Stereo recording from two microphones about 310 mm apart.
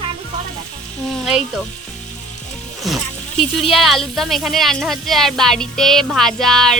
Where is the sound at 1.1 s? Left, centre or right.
Centre.